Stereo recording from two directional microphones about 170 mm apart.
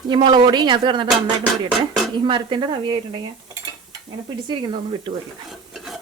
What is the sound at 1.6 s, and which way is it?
Speech, centre (ahead or behind).